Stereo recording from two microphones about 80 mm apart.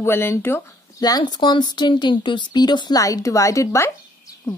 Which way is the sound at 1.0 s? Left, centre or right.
Left.